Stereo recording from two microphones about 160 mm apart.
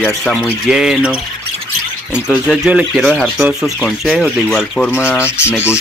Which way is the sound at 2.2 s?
5° right (ahead or behind).